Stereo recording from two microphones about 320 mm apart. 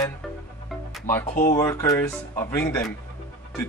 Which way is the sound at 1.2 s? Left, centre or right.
Left.